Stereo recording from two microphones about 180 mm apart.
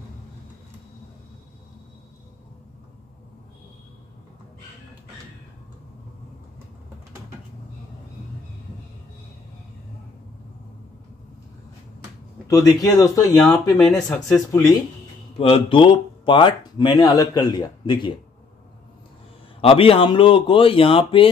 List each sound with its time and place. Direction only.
12.4 s speech: 20° left (ahead or behind)
13.4 s speech: centre (ahead or behind)
14.5 s speech: 20° left (ahead or behind)
19.6 s speech: 30° left (ahead or behind)